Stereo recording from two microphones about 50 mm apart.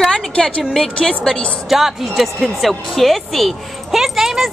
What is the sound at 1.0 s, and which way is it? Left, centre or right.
Speech, centre.